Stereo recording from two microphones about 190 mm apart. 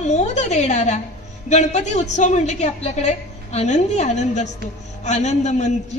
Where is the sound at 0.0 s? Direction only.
35° left (ahead or behind).